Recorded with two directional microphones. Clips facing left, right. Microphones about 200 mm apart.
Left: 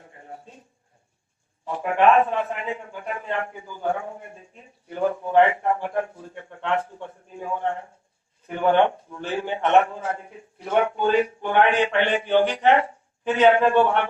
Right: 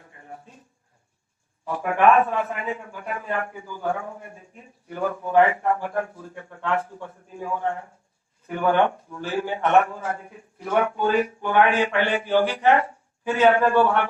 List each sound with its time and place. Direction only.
1.6 s a man's voice: 20° left (ahead or behind)